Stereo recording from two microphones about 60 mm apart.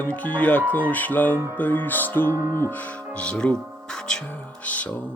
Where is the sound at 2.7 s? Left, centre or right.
Left; by 4.2 s centre.